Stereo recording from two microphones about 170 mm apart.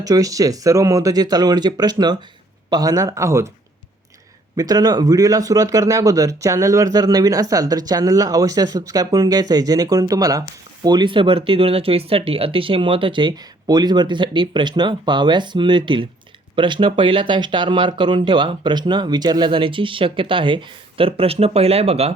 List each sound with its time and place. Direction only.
0.0 s speech: 20° right (ahead or behind)
4.5 s speech: 20° right (ahead or behind)